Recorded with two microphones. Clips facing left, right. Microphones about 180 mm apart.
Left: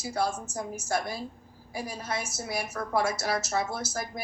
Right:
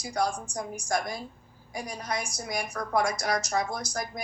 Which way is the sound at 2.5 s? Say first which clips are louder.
Even; 5° left (ahead or behind).